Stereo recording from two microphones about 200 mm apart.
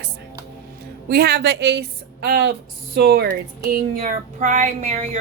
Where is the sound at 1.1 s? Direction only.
55° right (ahead or behind).